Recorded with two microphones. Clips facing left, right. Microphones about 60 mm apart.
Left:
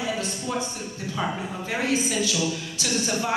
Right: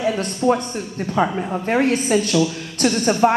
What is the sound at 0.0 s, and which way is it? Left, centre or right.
Speech, right.